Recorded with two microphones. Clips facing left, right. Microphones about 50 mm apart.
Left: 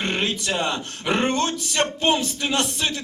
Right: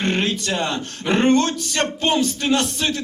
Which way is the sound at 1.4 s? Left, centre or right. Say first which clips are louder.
Right 2 dB; left.